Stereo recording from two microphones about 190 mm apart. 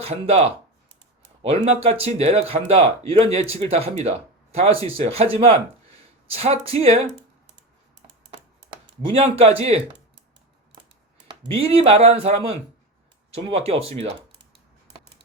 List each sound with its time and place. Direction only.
0.0 s speech: 30° right (ahead or behind)
9.0 s speech: 30° right (ahead or behind)
11.4 s speech: 30° right (ahead or behind)